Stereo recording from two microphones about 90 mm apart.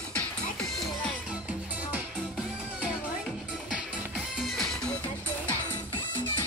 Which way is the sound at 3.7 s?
5° right (ahead or behind).